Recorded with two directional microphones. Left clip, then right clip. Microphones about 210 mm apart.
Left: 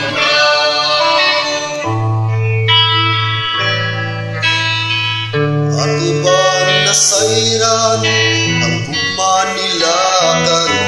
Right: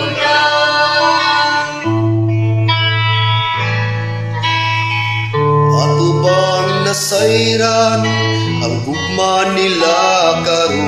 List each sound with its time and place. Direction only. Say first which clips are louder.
5.7 s music: right 2 dB; 45° right (ahead or behind)
9.2 s music: right 2 dB; 45° right (ahead or behind)